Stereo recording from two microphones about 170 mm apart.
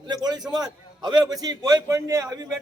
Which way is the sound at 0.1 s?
25° right (ahead or behind).